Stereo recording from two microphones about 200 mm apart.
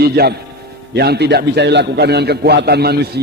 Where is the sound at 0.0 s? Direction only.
50° right (ahead or behind).